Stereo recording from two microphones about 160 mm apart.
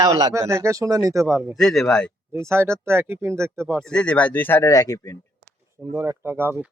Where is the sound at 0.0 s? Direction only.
25° right (ahead or behind).